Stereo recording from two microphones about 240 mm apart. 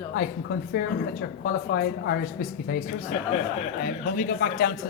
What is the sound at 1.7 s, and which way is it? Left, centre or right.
Speech, left.